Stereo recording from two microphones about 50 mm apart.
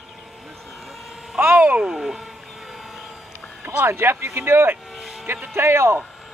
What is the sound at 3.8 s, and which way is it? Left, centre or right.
Speech, right.